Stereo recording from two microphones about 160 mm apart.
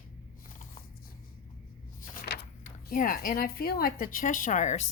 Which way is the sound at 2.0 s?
70° left (ahead or behind).